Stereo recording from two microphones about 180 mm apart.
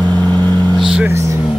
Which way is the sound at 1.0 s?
15° right (ahead or behind).